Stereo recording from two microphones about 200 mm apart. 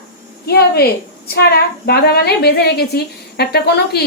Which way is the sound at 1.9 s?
55° left (ahead or behind).